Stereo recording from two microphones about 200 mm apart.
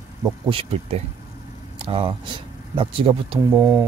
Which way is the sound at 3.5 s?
15° right (ahead or behind).